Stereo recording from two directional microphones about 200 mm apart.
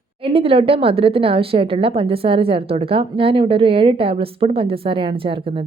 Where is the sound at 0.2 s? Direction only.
25° right (ahead or behind).